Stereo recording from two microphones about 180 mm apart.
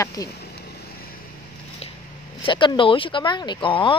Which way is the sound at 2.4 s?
25° left (ahead or behind).